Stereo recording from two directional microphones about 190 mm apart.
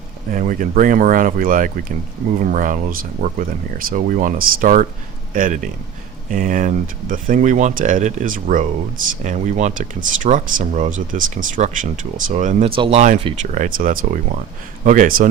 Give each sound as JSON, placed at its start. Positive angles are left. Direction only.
{"t": 0.3, "sound": "speech", "side_deg": -45}
{"t": 12.7, "sound": "speech", "side_deg": -30}